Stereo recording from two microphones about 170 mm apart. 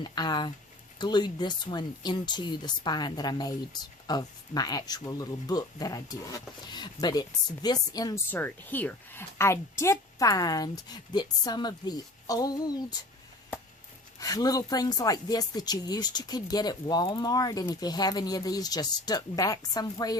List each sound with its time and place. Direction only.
0.0 s speech: 25° left (ahead or behind)
8.3 s speech: 10° left (ahead or behind)
14.2 s speech: 20° left (ahead or behind)